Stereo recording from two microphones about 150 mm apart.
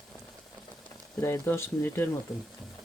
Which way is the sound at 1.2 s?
15° left (ahead or behind).